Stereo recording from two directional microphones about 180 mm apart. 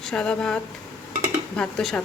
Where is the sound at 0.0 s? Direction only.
5° left (ahead or behind).